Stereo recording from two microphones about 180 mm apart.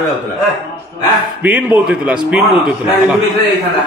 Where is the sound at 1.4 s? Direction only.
10° right (ahead or behind).